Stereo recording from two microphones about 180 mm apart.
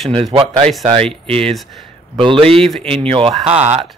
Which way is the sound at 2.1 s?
30° right (ahead or behind).